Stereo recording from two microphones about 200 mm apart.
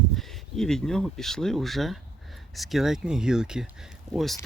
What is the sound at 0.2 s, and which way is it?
Speech, centre (ahead or behind).